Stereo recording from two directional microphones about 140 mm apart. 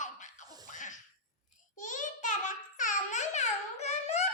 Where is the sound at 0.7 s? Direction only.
65° left (ahead or behind).